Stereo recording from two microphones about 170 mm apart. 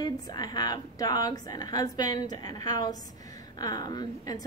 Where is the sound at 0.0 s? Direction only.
25° left (ahead or behind).